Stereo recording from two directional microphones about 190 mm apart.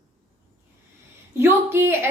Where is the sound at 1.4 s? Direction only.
10° right (ahead or behind).